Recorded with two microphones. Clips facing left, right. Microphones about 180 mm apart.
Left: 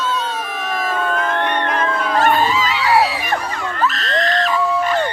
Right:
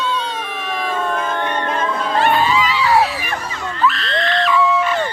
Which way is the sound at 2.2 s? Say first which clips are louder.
Even; 45° left (ahead or behind).